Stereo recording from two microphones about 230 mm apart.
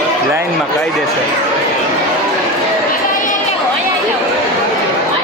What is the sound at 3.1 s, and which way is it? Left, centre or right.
Chatter, left.